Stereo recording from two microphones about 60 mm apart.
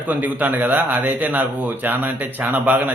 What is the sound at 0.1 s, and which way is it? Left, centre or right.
A man's voice, right.